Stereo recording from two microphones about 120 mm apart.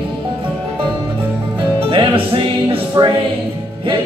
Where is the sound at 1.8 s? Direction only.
45° right (ahead or behind).